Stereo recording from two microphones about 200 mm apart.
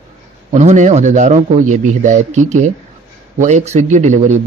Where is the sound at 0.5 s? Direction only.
35° right (ahead or behind).